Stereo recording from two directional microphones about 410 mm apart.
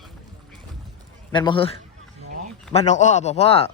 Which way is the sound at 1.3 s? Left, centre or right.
Centre.